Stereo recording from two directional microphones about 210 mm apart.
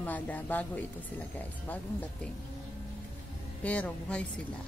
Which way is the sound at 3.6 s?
5° left (ahead or behind).